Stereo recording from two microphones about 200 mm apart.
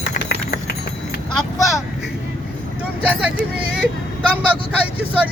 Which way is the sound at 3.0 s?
10° right (ahead or behind).